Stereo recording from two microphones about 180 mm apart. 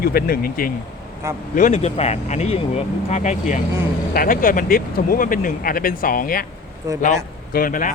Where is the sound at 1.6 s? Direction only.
40° left (ahead or behind).